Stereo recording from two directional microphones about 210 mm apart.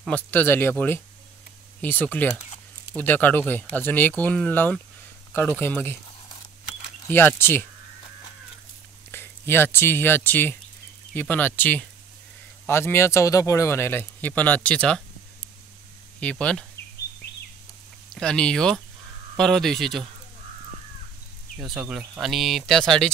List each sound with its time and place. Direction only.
0.1 s speech: 10° left (ahead or behind)
7.1 s speech: 10° left (ahead or behind)
9.1 s speech: 10° left (ahead or behind)
16.2 s speech: 5° left (ahead or behind)
16.7 s bird: 50° left (ahead or behind)
18.1 s speech: 5° left (ahead or behind)
21.6 s speech: 5° right (ahead or behind)